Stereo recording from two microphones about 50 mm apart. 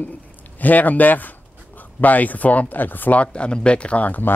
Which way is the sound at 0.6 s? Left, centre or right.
Left.